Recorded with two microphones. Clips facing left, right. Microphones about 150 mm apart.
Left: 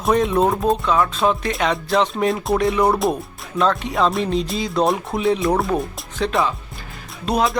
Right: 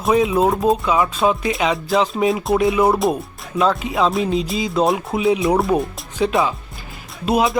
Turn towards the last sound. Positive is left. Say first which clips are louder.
# right 2 dB
turn(degrees=-5)  # may be behind; listen again after turning